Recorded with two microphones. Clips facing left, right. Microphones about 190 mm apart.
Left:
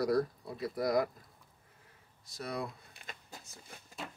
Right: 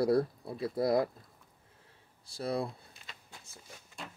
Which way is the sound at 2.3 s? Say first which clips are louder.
Right 5 dB; 30° right (ahead or behind).